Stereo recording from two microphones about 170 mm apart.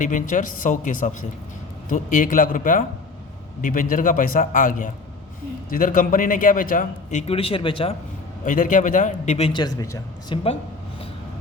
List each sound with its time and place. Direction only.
0.0 s a man's voice: 50° left (ahead or behind); by 7.9 s 30° left (ahead or behind)
8.4 s a man's voice: 50° left (ahead or behind)
9.5 s a man's voice: 25° left (ahead or behind)